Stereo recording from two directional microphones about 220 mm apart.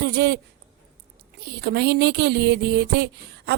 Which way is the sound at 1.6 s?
45° right (ahead or behind).